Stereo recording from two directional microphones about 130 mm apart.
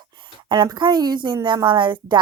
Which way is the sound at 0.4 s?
35° right (ahead or behind).